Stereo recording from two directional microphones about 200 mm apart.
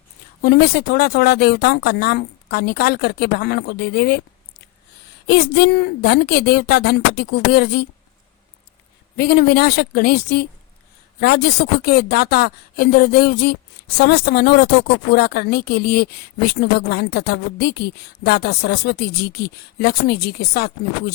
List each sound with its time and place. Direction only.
0.4 s speech: 50° left (ahead or behind)
5.2 s speech: 55° left (ahead or behind)
9.1 s speech: 55° left (ahead or behind)